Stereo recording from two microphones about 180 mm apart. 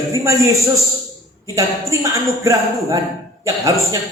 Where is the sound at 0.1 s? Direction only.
20° right (ahead or behind).